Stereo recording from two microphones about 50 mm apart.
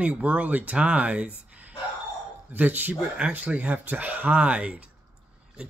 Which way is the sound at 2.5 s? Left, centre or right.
Right.